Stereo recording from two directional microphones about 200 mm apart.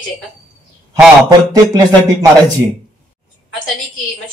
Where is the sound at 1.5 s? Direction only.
20° right (ahead or behind).